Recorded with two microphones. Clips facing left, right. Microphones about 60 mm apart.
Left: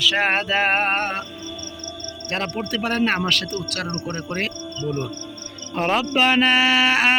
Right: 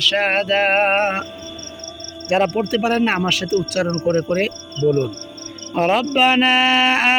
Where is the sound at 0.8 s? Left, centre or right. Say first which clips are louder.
Right 5 dB; centre.